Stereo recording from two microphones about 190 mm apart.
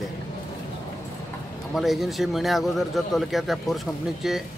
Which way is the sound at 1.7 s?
Centre (ahead or behind).